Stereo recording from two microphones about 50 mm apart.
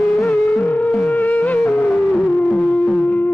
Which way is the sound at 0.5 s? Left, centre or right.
Left.